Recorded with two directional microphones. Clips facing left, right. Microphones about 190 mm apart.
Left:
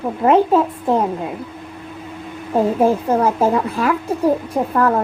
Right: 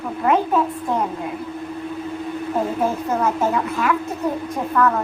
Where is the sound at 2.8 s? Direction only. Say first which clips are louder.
Left 5 dB; 30° left (ahead or behind).